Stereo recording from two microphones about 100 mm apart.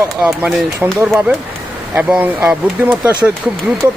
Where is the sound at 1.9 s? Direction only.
15° right (ahead or behind).